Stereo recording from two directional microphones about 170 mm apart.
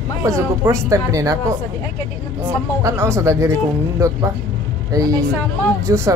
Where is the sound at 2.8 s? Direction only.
15° right (ahead or behind).